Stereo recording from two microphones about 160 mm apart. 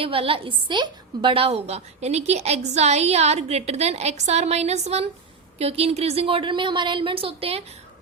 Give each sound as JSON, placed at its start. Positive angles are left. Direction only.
{"t": 0.0, "sound": "a woman's voice", "side_deg": -35}